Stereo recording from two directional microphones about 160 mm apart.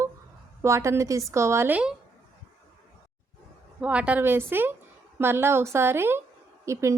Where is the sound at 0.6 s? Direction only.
20° right (ahead or behind).